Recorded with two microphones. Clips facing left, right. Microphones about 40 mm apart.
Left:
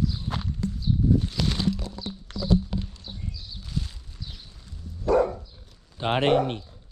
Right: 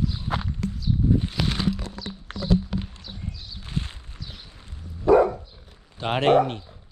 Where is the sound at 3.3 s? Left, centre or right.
Right.